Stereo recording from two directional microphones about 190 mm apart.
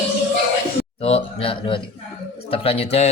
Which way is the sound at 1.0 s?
30° left (ahead or behind).